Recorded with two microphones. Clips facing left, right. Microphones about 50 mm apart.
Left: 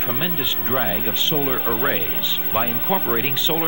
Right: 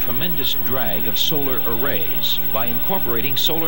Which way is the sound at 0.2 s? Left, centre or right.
Left.